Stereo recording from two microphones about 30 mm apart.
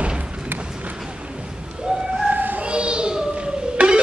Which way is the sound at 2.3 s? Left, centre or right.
Right.